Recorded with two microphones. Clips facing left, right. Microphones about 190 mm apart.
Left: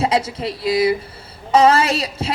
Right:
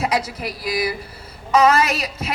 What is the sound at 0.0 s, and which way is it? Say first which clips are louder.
A woman's voice: left 3 dB; 25° left (ahead or behind).